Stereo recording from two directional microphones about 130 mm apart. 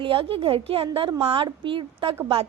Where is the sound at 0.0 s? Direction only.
45° right (ahead or behind).